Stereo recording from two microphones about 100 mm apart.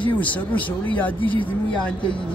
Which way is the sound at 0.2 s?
15° left (ahead or behind).